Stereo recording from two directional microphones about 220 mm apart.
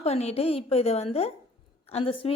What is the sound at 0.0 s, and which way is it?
A woman's voice, 30° left (ahead or behind).